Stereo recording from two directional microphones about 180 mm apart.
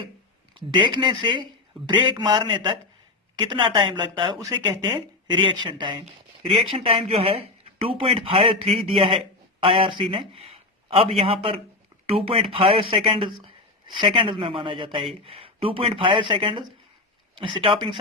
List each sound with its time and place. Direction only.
0.7 s speech: 25° right (ahead or behind)